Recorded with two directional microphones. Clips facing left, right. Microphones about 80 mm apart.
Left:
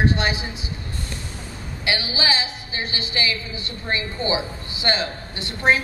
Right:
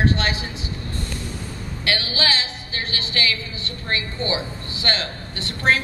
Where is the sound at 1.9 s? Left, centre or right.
Centre.